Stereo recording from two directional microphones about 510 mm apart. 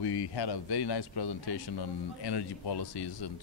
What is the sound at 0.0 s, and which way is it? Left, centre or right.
A man's voice, left.